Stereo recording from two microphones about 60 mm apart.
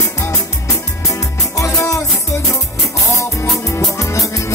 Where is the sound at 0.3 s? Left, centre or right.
Left.